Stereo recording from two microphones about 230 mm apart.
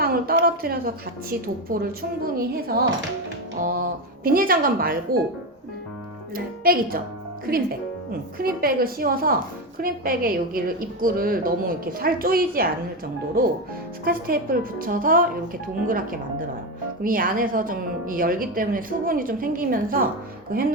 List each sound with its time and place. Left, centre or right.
0.0 s a woman's voice: right
6.3 s speech: right
14.0 s speech: right